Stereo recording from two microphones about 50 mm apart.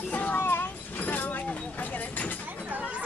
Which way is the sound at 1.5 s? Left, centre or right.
Left.